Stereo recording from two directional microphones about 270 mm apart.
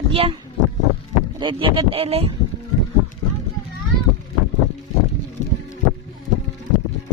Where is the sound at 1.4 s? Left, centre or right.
Centre.